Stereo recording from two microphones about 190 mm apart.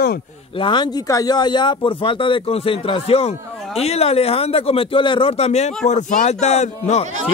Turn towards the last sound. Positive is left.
turn(degrees=35)  # may be behind; listen again after turning